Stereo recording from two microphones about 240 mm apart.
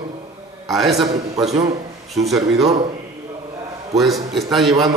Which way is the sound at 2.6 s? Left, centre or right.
Right.